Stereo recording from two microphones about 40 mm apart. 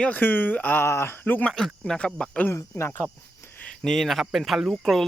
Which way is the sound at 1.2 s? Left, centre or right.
Left.